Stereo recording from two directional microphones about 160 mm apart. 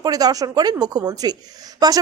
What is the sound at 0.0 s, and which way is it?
Speech, 25° right (ahead or behind).